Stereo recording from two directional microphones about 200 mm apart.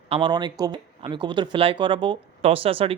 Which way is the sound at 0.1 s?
25° right (ahead or behind).